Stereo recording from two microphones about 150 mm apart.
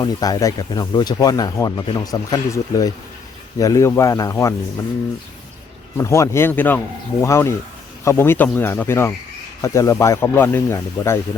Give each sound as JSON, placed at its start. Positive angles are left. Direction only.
{"t": 0.0, "sound": "speech", "side_deg": 25}
{"t": 6.0, "sound": "speech", "side_deg": 20}